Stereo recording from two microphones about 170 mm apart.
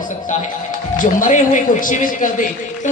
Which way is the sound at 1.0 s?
50° left (ahead or behind).